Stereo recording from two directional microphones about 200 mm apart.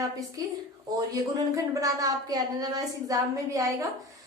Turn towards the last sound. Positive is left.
turn(degrees=-15)  # may be behind; listen again after turning